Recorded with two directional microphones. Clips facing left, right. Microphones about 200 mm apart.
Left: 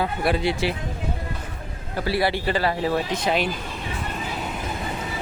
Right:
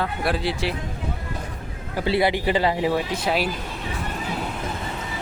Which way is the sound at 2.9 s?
5° right (ahead or behind).